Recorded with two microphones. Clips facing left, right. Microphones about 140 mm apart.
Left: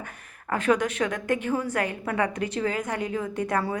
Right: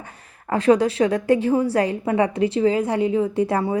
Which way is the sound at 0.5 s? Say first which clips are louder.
Right 7 dB; 30° right (ahead or behind).